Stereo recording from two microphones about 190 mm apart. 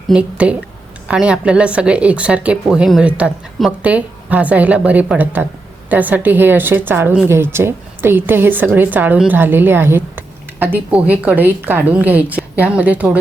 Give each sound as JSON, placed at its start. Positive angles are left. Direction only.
{"t": 0.1, "sound": "a woman's voice", "side_deg": -5}